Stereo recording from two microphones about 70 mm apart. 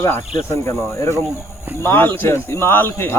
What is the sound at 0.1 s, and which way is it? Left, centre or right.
Speech, left.